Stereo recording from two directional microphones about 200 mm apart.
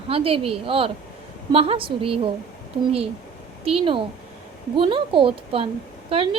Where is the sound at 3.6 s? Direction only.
25° right (ahead or behind).